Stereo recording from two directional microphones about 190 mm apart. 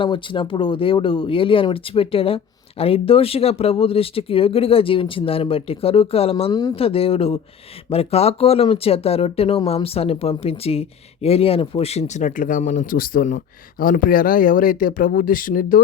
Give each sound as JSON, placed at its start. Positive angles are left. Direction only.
{"t": 0.0, "sound": "speech", "side_deg": 25}